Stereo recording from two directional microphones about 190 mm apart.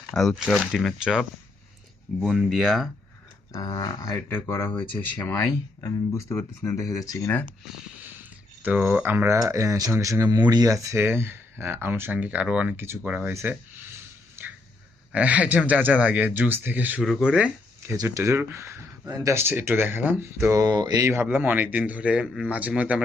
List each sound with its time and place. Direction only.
0.1 s speech: centre (ahead or behind)
3.5 s speech: 20° left (ahead or behind)
8.6 s speech: 10° right (ahead or behind)
14.4 s a sound: 10° right (ahead or behind)
15.1 s speech: 5° right (ahead or behind)
17.3 s a sound: 5° right (ahead or behind)
17.9 s speech: 15° right (ahead or behind)